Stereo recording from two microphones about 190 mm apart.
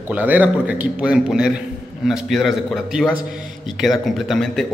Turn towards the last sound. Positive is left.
turn(degrees=0)  # may be behind; listen again after turning